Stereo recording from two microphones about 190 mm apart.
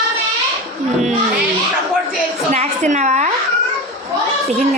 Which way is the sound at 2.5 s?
35° right (ahead or behind).